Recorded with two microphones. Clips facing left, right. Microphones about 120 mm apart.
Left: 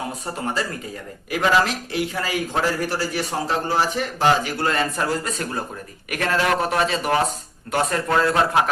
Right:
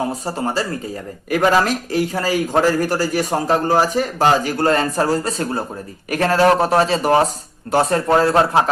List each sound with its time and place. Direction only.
0.1 s a man's voice: 30° right (ahead or behind)
1.3 s a man's voice: 45° right (ahead or behind)